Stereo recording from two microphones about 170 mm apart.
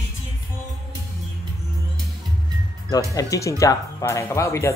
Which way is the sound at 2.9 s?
20° left (ahead or behind).